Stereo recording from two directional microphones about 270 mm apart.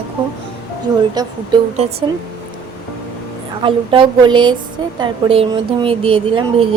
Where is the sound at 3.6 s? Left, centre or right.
Centre.